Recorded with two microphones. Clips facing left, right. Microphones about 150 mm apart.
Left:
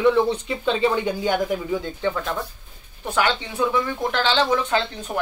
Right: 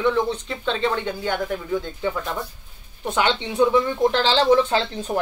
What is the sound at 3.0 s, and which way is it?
A woman's voice, 20° right (ahead or behind).